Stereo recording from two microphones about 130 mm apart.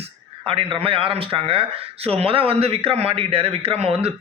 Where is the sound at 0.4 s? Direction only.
45° right (ahead or behind).